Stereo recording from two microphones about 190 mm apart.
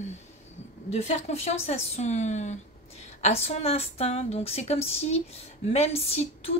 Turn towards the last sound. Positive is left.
turn(degrees=30)  # may be behind; listen again after turning